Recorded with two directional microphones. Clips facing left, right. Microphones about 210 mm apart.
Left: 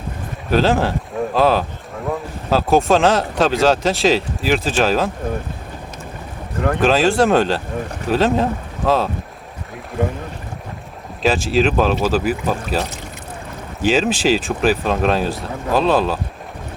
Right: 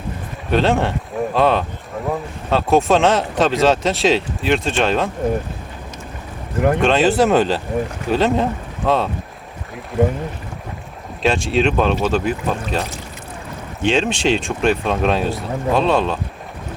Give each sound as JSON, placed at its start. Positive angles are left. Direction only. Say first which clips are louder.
{"t": 0.5, "sound": "speech", "louder": "left 1 dB", "side_deg": 0}
{"t": 6.8, "sound": "speech", "louder": "left 2 dB", "side_deg": 0}
{"t": 11.2, "sound": "speech", "louder": "left 1 dB", "side_deg": 0}
{"t": 13.8, "sound": "speech", "louder": "left 1 dB", "side_deg": 5}